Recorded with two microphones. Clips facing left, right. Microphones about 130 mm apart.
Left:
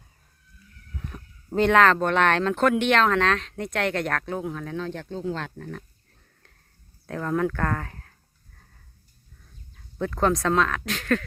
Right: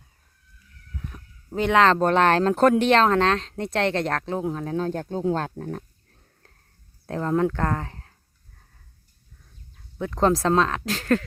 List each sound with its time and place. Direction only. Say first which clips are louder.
1.5 s speech: left 1 dB; 10° right (ahead or behind)
1.8 s speech: right 2 dB; 30° right (ahead or behind)
7.1 s speech: right 3 dB; 25° right (ahead or behind)
10.2 s speech: right 2 dB; 30° right (ahead or behind)